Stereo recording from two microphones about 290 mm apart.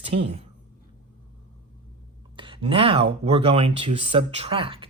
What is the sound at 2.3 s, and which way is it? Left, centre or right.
Speech, centre.